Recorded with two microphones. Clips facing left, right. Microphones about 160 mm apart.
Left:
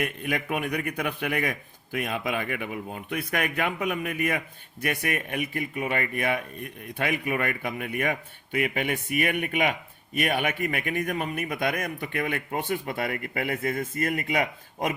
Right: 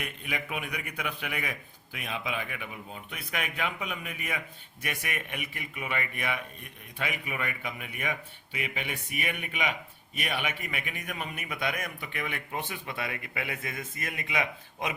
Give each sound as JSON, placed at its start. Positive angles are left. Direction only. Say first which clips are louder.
{"t": 0.0, "sound": "a man's voice", "louder": "left 8 dB", "side_deg": 50}